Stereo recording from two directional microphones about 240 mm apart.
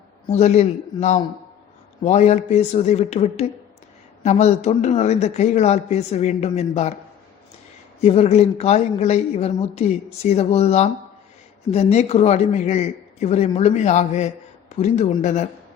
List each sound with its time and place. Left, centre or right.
0.3 s a woman's voice: left
8.0 s a woman's voice: left